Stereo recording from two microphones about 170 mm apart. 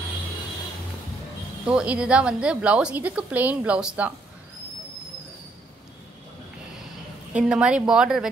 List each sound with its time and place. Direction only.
1.7 s a woman's voice: 5° right (ahead or behind)
7.4 s speech: 5° right (ahead or behind)